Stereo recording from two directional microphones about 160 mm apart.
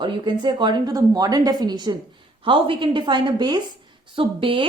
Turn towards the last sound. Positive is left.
turn(degrees=-30)  # may be behind; listen again after turning